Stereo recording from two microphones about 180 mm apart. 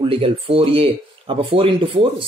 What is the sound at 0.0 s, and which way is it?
Speech, 30° right (ahead or behind).